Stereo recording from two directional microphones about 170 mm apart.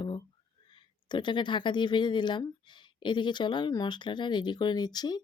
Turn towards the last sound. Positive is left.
turn(degrees=25)  # may be behind; listen again after turning